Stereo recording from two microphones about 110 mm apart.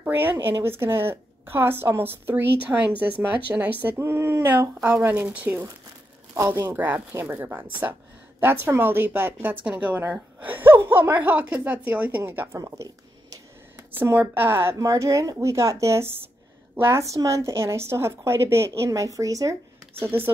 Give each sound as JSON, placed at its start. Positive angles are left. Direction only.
{"t": 0.0, "sound": "a woman's voice", "side_deg": -20}
{"t": 12.5, "sound": "speech", "side_deg": -30}
{"t": 13.9, "sound": "a woman's voice", "side_deg": -20}
{"t": 20.0, "sound": "a woman's voice", "side_deg": -20}